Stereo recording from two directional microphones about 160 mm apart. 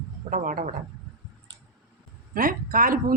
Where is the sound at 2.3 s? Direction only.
60° right (ahead or behind).